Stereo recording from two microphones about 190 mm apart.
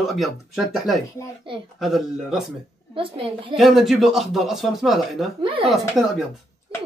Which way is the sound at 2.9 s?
25° right (ahead or behind).